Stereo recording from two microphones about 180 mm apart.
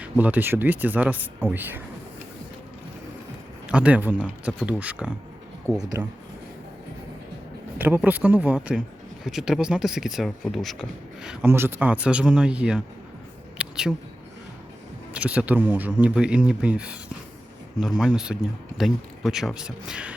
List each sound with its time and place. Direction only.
0.0 s speech: 10° right (ahead or behind)
3.7 s speech: 5° right (ahead or behind)
7.8 s speech: 10° right (ahead or behind)
13.6 s a sound: 5° right (ahead or behind)
15.1 s speech: 5° right (ahead or behind)